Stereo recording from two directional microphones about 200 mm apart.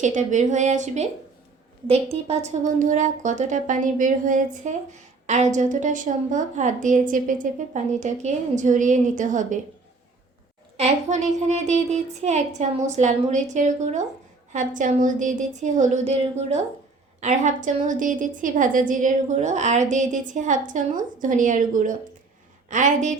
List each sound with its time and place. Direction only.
0.0 s speech: 40° right (ahead or behind)
10.8 s speech: 35° right (ahead or behind)